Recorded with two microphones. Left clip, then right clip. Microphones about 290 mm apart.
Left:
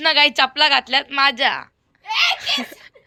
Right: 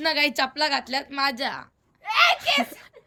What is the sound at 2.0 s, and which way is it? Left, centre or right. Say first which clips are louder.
Speech: left 1 dB; centre.